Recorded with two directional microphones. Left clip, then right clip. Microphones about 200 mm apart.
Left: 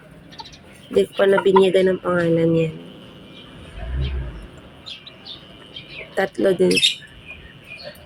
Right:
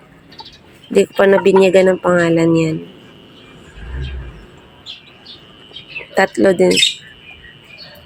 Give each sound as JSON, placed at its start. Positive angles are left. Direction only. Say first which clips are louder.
{"t": 0.9, "sound": "speech", "louder": "right 5 dB", "side_deg": -35}
{"t": 6.1, "sound": "speech", "louder": "right 6 dB", "side_deg": -30}